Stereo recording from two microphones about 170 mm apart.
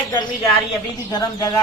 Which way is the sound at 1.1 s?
25° left (ahead or behind).